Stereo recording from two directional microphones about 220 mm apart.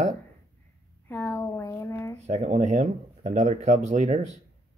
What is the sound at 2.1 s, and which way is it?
Speech, 30° right (ahead or behind).